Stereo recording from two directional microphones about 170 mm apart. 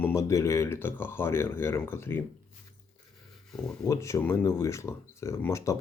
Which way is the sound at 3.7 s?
15° left (ahead or behind).